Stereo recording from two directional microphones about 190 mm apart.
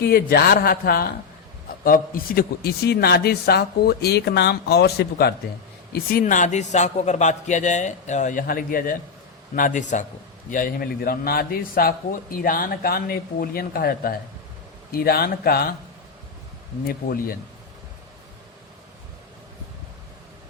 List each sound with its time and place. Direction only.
0.0 s a man's voice: 55° left (ahead or behind)
16.8 s speech: 50° left (ahead or behind)